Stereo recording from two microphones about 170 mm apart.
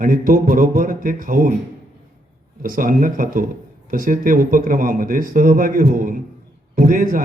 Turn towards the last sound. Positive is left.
turn(degrees=-55)  # may be behind; listen again after turning